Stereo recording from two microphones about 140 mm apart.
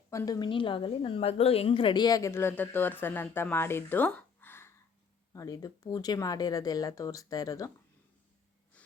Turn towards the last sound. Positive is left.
turn(degrees=25)  # may be behind; listen again after turning